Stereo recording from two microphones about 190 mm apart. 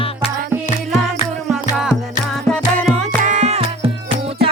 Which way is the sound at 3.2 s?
35° right (ahead or behind).